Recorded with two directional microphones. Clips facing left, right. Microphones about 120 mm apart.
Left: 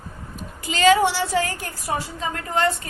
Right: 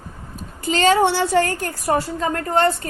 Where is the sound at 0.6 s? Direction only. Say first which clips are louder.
Right 1 dB; 40° right (ahead or behind).